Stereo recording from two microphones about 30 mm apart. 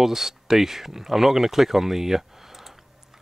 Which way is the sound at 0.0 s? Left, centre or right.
Centre.